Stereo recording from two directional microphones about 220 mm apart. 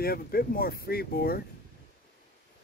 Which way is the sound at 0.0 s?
45° left (ahead or behind).